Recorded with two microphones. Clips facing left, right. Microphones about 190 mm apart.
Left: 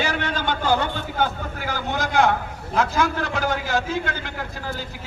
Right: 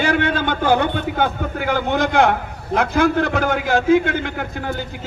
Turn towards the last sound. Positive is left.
turn(degrees=-60)  # may be behind; listen again after turning